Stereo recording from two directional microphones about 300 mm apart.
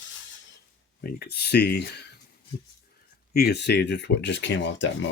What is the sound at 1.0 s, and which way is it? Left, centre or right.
Speech, left.